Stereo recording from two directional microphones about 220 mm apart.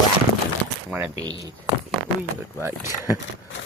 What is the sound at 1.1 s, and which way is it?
Speech, 15° right (ahead or behind).